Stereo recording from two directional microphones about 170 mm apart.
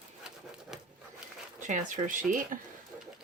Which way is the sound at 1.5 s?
45° right (ahead or behind).